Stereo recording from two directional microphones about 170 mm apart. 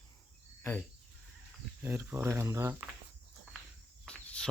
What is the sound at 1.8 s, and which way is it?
Mantra, 15° right (ahead or behind).